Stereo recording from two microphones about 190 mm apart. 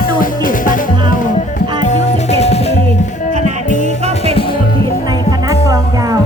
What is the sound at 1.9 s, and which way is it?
Music, 35° left (ahead or behind).